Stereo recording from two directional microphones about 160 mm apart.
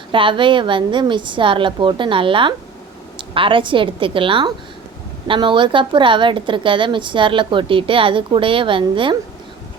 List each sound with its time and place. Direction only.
0.1 s a woman's voice: 30° right (ahead or behind)